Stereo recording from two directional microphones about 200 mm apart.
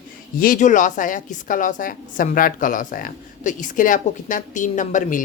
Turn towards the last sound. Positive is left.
turn(degrees=40)  # may be behind; listen again after turning